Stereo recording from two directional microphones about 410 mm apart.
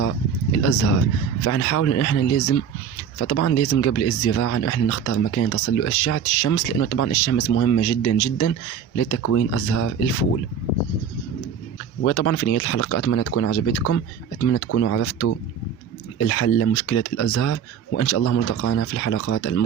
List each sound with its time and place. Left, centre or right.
0.6 s speech: left
12.0 s speech: left